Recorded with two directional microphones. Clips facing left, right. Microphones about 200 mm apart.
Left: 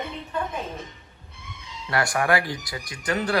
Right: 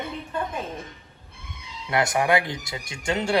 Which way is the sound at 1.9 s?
20° right (ahead or behind).